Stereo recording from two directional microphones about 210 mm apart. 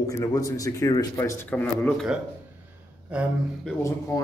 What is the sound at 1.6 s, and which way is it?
Speech, centre (ahead or behind).